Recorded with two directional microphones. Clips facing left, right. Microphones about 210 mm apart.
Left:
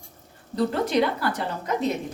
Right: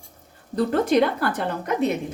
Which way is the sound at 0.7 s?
50° right (ahead or behind).